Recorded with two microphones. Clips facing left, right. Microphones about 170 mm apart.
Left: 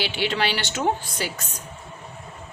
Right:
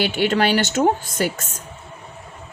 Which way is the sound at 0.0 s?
45° right (ahead or behind).